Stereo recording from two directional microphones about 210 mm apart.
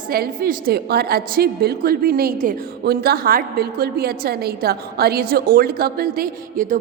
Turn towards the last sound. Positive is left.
turn(degrees=-40)  # may be behind; listen again after turning